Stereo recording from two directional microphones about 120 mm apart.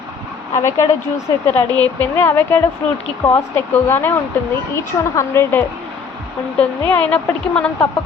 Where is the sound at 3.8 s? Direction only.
15° left (ahead or behind).